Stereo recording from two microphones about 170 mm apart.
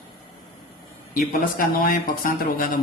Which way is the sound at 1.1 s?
55° left (ahead or behind).